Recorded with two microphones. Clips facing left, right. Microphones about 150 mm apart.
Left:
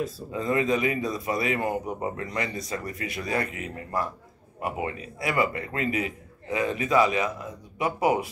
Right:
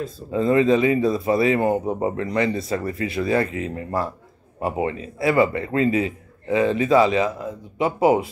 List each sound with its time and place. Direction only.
0.3 s a man's voice: 30° right (ahead or behind)